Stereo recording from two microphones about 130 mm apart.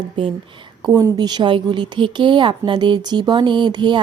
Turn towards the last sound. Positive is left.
turn(degrees=-35)  # may be behind; listen again after turning